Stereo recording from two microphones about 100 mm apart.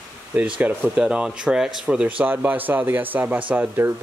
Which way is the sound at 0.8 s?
10° right (ahead or behind).